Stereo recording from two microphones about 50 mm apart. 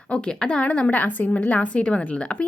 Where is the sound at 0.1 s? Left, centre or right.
Centre.